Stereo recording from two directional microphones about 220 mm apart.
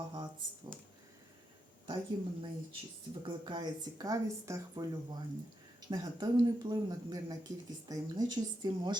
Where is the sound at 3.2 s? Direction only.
20° right (ahead or behind).